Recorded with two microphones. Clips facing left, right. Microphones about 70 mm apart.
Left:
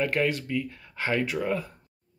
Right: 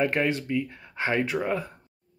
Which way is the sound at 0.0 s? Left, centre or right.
Right.